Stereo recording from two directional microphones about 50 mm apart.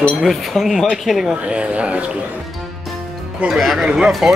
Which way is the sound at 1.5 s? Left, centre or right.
Right.